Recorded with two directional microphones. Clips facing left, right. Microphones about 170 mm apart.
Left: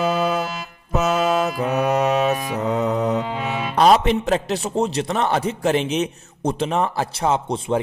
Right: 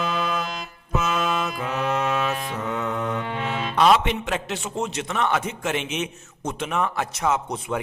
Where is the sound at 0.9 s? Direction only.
40° left (ahead or behind).